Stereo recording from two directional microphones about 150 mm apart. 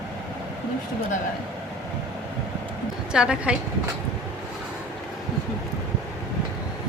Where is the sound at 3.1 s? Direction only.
5° right (ahead or behind).